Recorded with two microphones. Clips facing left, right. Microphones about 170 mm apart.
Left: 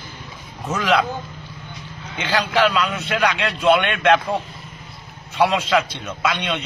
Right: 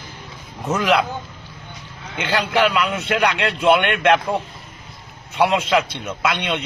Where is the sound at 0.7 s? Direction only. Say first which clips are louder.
Right 1 dB; 15° right (ahead or behind).